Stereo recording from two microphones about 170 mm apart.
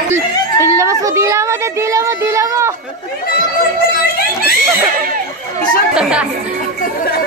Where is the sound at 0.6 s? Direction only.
15° right (ahead or behind).